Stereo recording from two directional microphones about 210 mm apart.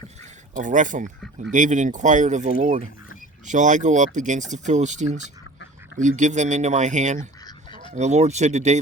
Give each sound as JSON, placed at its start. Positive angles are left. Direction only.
{"t": 0.2, "sound": "a sound", "side_deg": -35}
{"t": 1.5, "sound": "speech", "side_deg": -35}
{"t": 7.4, "sound": "duck", "side_deg": 25}
{"t": 7.9, "sound": "speech", "side_deg": -30}